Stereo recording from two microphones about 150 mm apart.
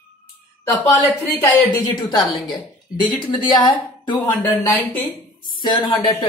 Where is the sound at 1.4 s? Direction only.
25° left (ahead or behind).